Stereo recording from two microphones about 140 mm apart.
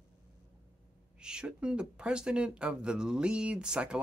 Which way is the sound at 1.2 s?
5° right (ahead or behind).